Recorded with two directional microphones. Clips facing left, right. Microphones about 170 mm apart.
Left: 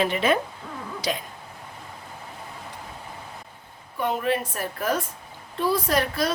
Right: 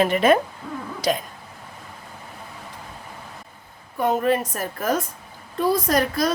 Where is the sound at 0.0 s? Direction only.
50° right (ahead or behind).